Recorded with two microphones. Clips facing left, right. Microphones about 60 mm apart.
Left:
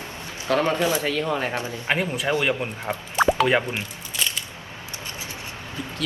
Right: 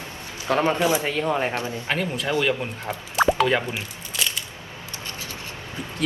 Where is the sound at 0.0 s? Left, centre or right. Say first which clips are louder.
Left 1 dB; left.